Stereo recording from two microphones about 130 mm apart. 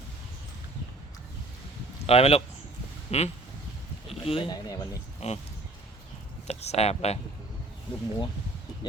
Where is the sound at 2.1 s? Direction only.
50° left (ahead or behind).